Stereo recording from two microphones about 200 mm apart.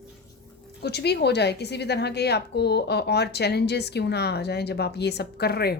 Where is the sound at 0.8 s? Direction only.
55° left (ahead or behind).